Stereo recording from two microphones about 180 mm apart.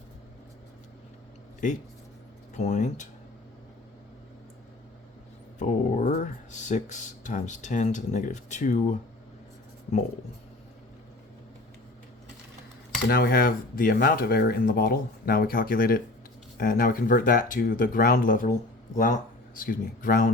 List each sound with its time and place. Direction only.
2.6 s speech: 40° left (ahead or behind)
5.5 s speech: 45° left (ahead or behind)
13.1 s speech: 60° left (ahead or behind)